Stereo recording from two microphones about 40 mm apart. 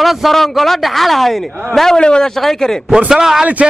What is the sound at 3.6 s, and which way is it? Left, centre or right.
Speech, right.